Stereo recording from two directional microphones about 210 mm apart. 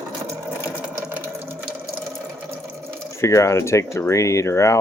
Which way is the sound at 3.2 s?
15° left (ahead or behind).